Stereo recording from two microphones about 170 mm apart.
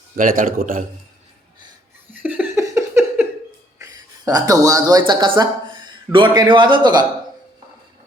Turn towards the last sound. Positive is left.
turn(degrees=-25)  # may be behind; listen again after turning